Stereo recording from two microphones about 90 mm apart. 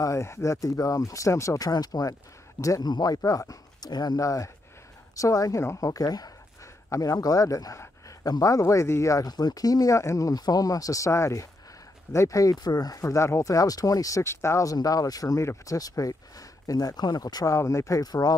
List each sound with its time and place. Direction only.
0.0 s speech: 35° left (ahead or behind)
1.7 s speech: 45° left (ahead or behind)